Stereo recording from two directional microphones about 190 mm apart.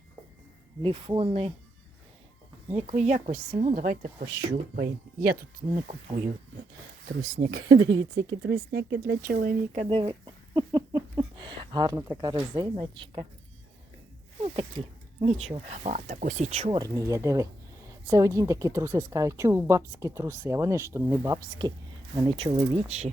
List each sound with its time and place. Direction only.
0.8 s speech: 25° right (ahead or behind)
2.6 s speech: 35° right (ahead or behind)
4.3 s speech: 60° right (ahead or behind)
5.7 s speech: 45° right (ahead or behind)
7.0 s speech: 55° right (ahead or behind)
7.5 s speech: 70° right (ahead or behind); by 9.6 s 50° right (ahead or behind)
9.7 s speech: 30° right (ahead or behind)
14.4 s speech: 30° right (ahead or behind)